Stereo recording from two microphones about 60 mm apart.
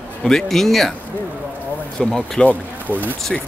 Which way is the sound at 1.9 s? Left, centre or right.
Centre.